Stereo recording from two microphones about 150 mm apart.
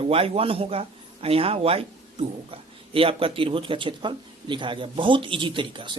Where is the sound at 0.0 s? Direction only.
40° right (ahead or behind).